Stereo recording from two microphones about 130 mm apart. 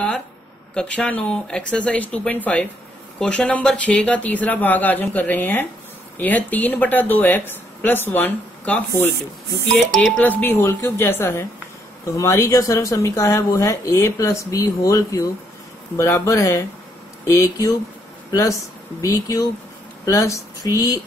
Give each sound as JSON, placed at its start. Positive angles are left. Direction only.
{"t": 0.7, "sound": "speech", "side_deg": 10}